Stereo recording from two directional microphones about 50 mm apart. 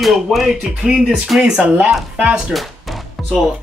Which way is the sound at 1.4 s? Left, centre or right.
Centre.